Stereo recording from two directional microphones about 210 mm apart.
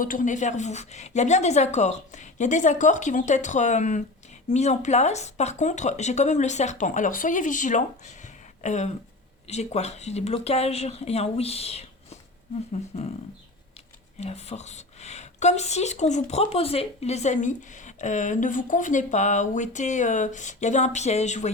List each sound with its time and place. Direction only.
0.0 s speech: 40° left (ahead or behind)
14.2 s speech: 30° left (ahead or behind)